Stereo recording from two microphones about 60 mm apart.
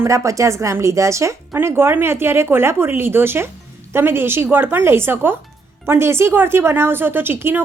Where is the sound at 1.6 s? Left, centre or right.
Right.